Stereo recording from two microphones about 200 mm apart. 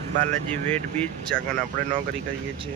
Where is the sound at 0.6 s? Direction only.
5° left (ahead or behind).